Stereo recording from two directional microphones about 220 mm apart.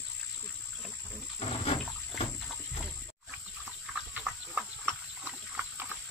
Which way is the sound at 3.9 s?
Centre (ahead or behind).